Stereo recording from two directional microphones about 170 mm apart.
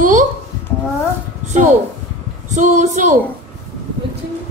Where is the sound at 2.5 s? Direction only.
45° right (ahead or behind).